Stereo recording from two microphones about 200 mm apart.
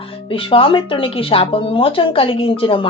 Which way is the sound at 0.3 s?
25° left (ahead or behind).